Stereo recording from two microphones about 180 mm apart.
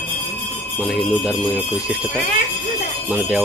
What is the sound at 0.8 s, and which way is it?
Speech, centre (ahead or behind).